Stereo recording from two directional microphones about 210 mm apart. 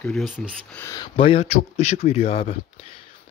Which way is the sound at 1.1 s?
25° left (ahead or behind).